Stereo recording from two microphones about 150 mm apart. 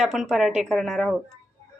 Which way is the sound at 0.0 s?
Centre (ahead or behind).